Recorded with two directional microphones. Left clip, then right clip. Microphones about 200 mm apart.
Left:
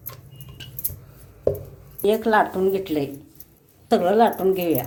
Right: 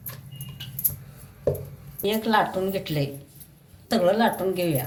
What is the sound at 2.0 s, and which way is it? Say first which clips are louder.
Speech: left 4 dB; 50° left (ahead or behind).